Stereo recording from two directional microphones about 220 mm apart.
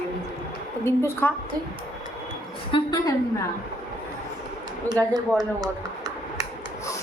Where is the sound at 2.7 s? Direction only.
20° left (ahead or behind).